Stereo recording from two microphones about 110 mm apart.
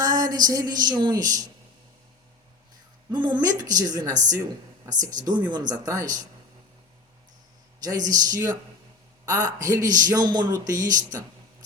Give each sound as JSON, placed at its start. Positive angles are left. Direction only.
{"t": 0.0, "sound": "a woman's voice", "side_deg": -35}
{"t": 3.1, "sound": "a man's voice", "side_deg": -45}
{"t": 5.7, "sound": "a man's voice", "side_deg": -30}
{"t": 7.8, "sound": "a man's voice", "side_deg": -35}